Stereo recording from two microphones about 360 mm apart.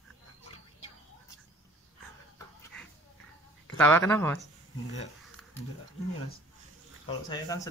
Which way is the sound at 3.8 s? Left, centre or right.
Centre.